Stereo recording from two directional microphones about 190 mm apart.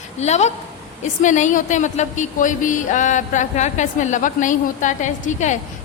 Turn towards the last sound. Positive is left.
turn(degrees=40)  # may be behind; listen again after turning